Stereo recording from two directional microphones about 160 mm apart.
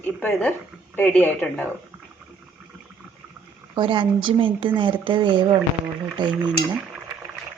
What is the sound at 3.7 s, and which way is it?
Speech, 30° right (ahead or behind).